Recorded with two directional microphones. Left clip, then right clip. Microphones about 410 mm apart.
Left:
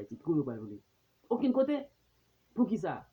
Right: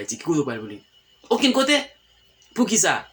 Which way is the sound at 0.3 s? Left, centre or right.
Left.